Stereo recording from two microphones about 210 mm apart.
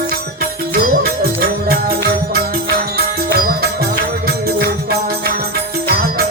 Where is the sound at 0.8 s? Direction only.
45° right (ahead or behind).